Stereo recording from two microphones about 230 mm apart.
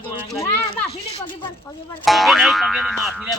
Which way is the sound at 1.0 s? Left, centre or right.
Left.